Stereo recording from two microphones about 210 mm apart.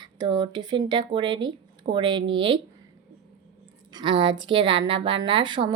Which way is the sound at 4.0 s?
20° right (ahead or behind).